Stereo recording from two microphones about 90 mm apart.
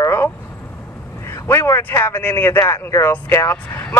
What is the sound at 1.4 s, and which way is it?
Speech, 30° left (ahead or behind).